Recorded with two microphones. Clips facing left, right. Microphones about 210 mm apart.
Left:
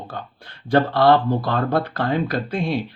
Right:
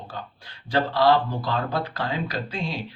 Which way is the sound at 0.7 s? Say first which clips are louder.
Left 4 dB; 55° left (ahead or behind).